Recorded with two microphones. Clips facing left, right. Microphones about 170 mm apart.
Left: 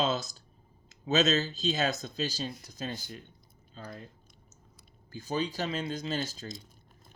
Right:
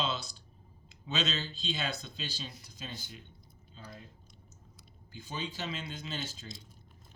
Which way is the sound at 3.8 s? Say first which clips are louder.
Left 6 dB; 55° left (ahead or behind).